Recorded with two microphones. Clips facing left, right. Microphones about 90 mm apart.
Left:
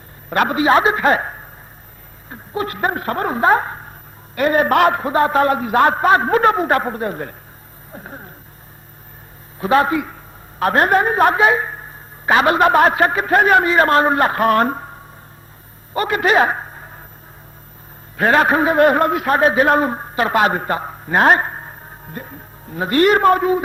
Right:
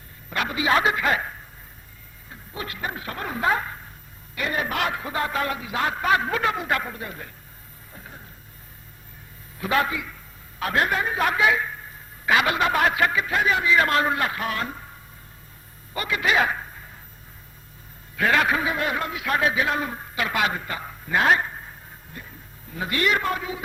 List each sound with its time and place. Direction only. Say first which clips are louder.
0.3 s a man's voice: left 9 dB; 50° left (ahead or behind)
7.9 s a sound: left 9 dB; 45° left (ahead or behind)
9.6 s a man's voice: left 8 dB; 35° left (ahead or behind); by 14.8 s 50° left (ahead or behind)
16.0 s a man's voice: left 7 dB; 45° left (ahead or behind)
18.2 s a man's voice: left 7 dB; 40° left (ahead or behind)